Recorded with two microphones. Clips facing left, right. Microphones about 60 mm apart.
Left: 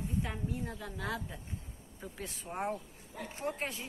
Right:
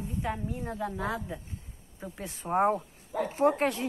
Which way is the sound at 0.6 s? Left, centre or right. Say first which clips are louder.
Right 7 dB; right.